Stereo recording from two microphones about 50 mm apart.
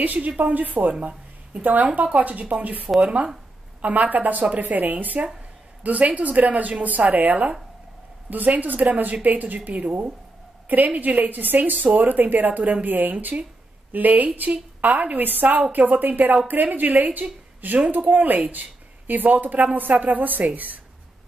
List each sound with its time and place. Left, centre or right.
0.0 s speech: right